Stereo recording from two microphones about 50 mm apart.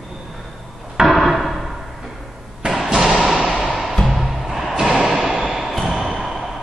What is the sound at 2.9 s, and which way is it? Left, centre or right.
Thump, centre.